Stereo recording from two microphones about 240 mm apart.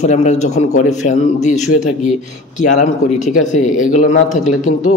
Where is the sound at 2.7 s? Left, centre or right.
Left.